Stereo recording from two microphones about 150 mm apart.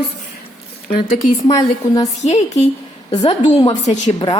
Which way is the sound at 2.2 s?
50° left (ahead or behind).